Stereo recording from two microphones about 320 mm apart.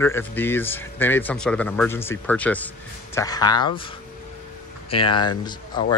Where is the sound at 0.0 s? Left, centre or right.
Centre.